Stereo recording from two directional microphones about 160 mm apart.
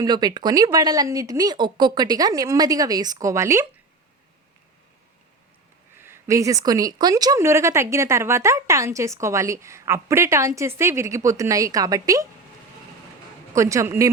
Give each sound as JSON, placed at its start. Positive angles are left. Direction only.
{"t": 0.0, "sound": "speech", "side_deg": -25}
{"t": 6.0, "sound": "speech", "side_deg": -15}
{"t": 13.5, "sound": "speech", "side_deg": -20}